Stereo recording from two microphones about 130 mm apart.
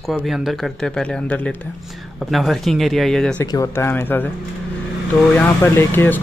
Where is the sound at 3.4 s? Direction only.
25° left (ahead or behind).